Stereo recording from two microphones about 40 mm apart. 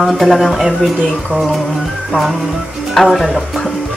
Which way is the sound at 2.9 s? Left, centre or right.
Centre.